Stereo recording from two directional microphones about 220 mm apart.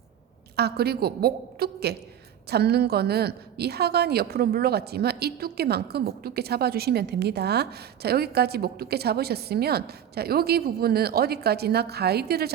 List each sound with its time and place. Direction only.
0.5 s a woman's voice: 45° right (ahead or behind)